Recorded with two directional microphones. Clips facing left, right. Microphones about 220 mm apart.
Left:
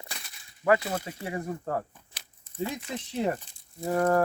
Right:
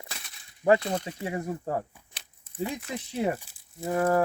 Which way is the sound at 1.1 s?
15° right (ahead or behind).